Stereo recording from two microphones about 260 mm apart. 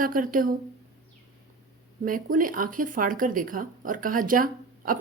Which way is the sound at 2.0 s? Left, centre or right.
Right.